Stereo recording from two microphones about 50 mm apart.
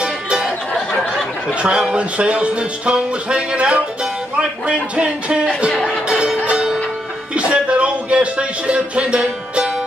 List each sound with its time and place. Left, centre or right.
0.0 s music: centre
1.5 s speech: right
4.0 s music: centre
7.3 s speech: right